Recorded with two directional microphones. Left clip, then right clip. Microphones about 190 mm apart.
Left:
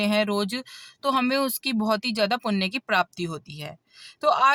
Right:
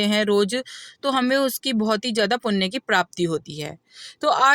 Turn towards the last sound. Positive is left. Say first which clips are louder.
# right 2 dB
turn(degrees=-20)  # may be behind; listen again after turning